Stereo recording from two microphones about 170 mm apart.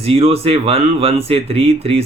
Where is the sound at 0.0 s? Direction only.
35° right (ahead or behind).